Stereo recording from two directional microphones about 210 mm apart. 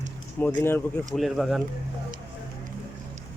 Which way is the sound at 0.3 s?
10° left (ahead or behind).